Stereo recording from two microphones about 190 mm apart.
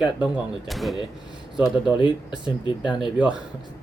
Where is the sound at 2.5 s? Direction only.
25° left (ahead or behind).